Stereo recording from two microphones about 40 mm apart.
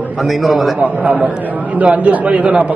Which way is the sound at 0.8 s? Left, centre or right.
Right.